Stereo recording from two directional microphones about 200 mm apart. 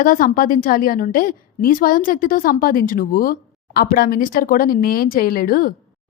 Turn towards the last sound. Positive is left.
turn(degrees=45)  # may be behind; listen again after turning